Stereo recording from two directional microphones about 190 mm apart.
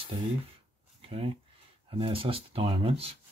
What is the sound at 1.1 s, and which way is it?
Speech, 30° right (ahead or behind).